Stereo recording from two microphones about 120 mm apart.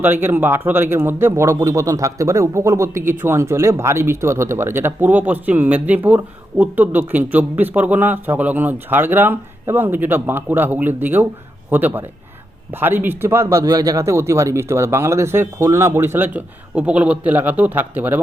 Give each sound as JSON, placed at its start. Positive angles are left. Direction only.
{"t": 0.0, "sound": "speech", "side_deg": -15}